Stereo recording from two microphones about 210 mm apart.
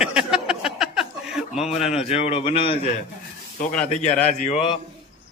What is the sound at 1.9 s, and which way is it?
A man's voice, 30° left (ahead or behind).